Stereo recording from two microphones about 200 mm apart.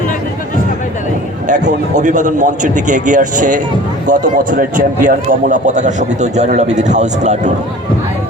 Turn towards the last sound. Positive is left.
turn(degrees=-35)  # may be behind; listen again after turning